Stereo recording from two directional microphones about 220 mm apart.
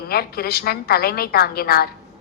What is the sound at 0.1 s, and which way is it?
A woman's voice, 45° left (ahead or behind).